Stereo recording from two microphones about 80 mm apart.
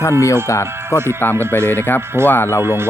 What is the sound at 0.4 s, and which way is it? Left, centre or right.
Speech, left.